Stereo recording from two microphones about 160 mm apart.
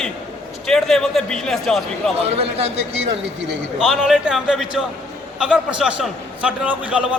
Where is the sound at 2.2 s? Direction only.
40° right (ahead or behind).